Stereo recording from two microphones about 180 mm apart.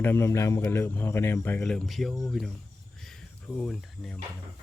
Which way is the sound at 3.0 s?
Centre (ahead or behind).